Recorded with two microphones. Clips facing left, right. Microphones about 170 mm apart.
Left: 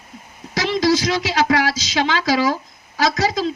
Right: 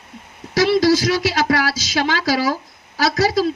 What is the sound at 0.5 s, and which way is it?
A woman's voice, 40° right (ahead or behind).